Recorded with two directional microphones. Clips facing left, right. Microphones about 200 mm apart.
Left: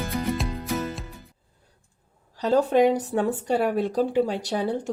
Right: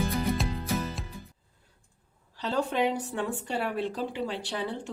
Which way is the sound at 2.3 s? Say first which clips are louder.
Left 9 dB; 45° left (ahead or behind).